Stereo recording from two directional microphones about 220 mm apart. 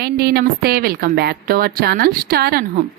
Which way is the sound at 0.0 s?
45° right (ahead or behind).